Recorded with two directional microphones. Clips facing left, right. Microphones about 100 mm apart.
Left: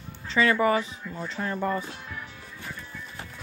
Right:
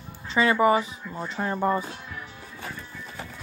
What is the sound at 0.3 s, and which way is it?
Speech, 15° right (ahead or behind).